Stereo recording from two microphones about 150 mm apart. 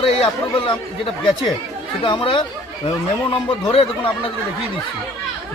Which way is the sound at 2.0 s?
35° left (ahead or behind).